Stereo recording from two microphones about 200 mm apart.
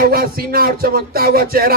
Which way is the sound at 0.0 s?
50° right (ahead or behind).